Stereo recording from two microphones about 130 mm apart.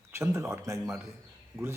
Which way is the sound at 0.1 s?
20° right (ahead or behind).